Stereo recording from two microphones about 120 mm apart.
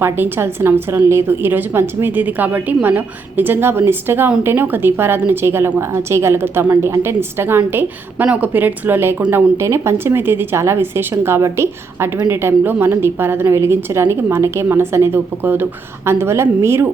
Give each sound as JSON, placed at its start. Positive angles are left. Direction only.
{"t": 0.0, "sound": "a woman's voice", "side_deg": -20}